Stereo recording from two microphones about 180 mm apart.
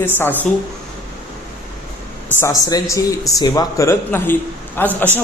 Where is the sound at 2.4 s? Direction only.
20° left (ahead or behind).